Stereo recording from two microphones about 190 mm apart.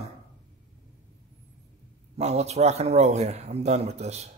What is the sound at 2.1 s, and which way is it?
A man's voice, 35° right (ahead or behind).